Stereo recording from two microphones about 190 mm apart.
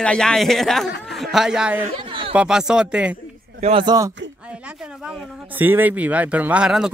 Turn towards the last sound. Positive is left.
turn(degrees=-5)  # may be behind; listen again after turning